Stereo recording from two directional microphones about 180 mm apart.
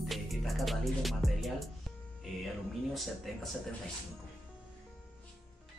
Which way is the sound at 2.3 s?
Centre (ahead or behind).